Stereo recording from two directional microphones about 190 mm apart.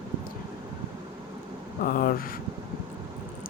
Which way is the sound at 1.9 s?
50° left (ahead or behind).